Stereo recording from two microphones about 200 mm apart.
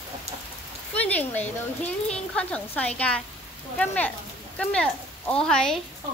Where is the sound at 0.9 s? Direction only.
10° left (ahead or behind).